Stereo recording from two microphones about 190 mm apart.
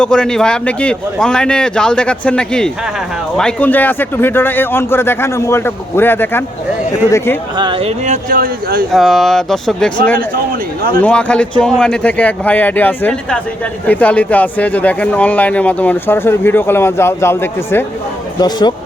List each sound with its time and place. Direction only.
0.0 s a man's voice: 5° left (ahead or behind)
7.5 s speech: 25° right (ahead or behind); by 8.9 s 50° right (ahead or behind)
8.9 s a man's voice: centre (ahead or behind)
11.0 s speech: 5° left (ahead or behind)